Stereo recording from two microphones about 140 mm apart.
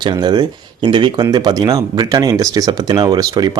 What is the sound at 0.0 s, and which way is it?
Speech, 30° right (ahead or behind).